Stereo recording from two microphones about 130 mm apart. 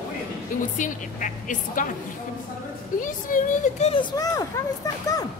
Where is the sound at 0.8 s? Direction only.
80° left.